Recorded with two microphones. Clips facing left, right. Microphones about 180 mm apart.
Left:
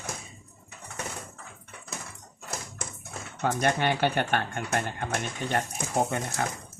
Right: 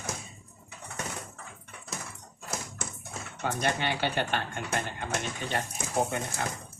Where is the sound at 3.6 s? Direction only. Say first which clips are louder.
Left 4 dB; 55° left (ahead or behind).